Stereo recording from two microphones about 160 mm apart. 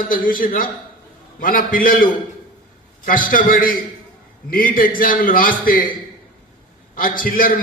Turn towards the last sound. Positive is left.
turn(degrees=60)  # may be behind; listen again after turning